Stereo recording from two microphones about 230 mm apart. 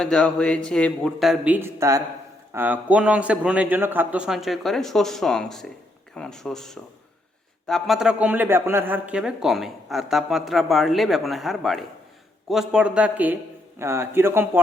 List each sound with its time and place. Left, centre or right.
0.0 s a man's voice: centre